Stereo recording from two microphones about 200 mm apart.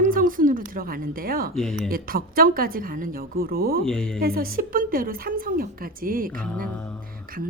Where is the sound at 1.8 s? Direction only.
45° right (ahead or behind).